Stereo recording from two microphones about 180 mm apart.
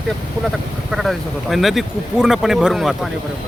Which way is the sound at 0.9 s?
Centre (ahead or behind).